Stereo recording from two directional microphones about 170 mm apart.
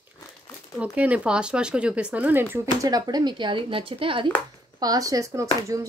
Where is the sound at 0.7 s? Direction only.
10° right (ahead or behind).